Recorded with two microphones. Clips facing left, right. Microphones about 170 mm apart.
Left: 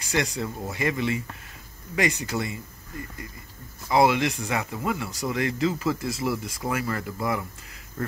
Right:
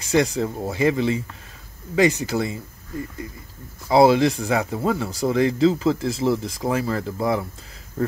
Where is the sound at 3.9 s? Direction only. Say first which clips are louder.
Right 6 dB; 30° right (ahead or behind).